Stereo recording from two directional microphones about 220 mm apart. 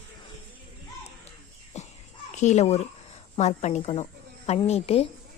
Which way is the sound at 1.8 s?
30° left (ahead or behind).